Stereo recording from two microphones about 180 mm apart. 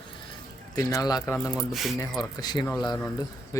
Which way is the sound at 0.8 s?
20° left (ahead or behind).